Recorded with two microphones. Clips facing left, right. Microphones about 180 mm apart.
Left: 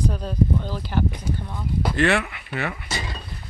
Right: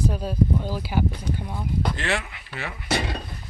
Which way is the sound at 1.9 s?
65° left (ahead or behind).